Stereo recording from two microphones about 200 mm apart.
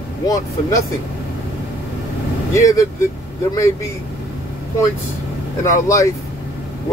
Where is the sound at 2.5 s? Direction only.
15° left (ahead or behind).